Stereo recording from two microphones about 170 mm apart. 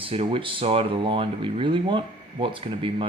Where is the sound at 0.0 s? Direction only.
35° right (ahead or behind).